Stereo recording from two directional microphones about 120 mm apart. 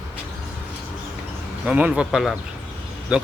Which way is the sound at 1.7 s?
10° right (ahead or behind).